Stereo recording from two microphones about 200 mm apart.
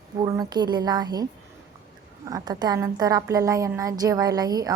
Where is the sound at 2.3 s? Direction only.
20° right (ahead or behind).